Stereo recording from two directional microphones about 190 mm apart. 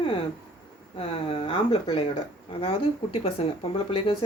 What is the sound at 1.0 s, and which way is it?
Speech, 30° left (ahead or behind).